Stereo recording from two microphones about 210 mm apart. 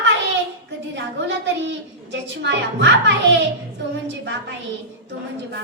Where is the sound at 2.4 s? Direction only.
55° right (ahead or behind).